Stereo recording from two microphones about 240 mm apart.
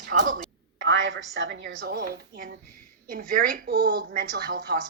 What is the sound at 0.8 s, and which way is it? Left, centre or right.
A woman's voice, right.